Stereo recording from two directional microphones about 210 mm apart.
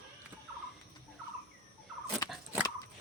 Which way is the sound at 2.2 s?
15° left (ahead or behind).